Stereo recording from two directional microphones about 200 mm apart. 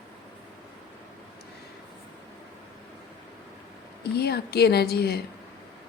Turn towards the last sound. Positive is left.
turn(degrees=55)  # may be behind; listen again after turning